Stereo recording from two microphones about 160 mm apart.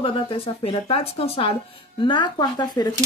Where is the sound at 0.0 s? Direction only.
35° left (ahead or behind).